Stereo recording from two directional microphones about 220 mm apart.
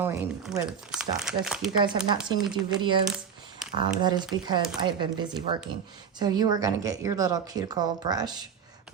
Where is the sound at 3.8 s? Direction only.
20° right (ahead or behind).